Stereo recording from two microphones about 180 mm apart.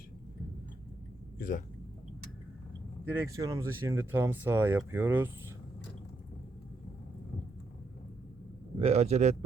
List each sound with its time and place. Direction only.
1.4 s a man's voice: 50° left (ahead or behind)
3.1 s speech: 15° right (ahead or behind)
8.8 s a man's voice: 35° right (ahead or behind)